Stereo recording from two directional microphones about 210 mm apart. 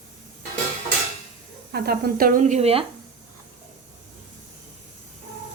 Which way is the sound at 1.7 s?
45° right (ahead or behind).